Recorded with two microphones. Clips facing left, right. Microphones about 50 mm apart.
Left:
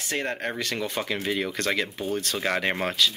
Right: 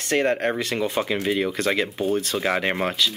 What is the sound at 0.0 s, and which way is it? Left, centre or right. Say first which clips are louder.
Speech: right 8 dB; right.